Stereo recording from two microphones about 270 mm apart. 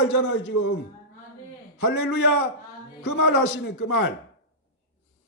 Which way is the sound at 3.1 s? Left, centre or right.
Left.